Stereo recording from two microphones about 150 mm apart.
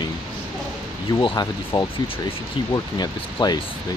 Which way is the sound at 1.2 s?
25° left (ahead or behind).